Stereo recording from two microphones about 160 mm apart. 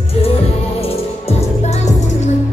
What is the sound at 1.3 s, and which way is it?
Music, 40° left (ahead or behind).